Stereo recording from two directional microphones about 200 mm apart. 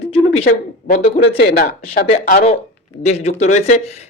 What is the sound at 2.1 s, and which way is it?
Speech, 35° left (ahead or behind).